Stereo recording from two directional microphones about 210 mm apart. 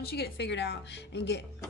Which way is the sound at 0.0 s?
50° left (ahead or behind).